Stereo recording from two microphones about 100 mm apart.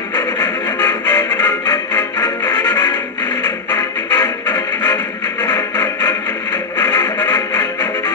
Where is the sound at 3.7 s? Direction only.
30° left (ahead or behind).